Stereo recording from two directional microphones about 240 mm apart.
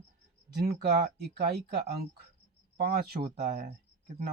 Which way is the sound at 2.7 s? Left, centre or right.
Right.